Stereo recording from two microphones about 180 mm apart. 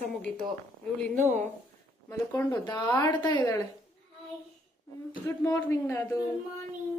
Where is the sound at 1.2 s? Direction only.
40° right (ahead or behind).